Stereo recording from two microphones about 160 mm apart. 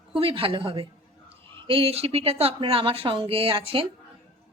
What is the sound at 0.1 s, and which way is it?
A woman's voice, 35° right (ahead or behind).